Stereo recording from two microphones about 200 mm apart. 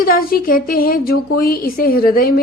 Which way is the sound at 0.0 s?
45° left (ahead or behind).